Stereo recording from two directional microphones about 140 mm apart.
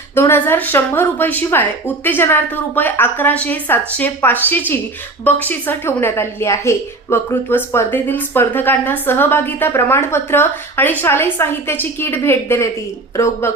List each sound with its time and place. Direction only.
0.2 s a woman's voice: 15° left (ahead or behind)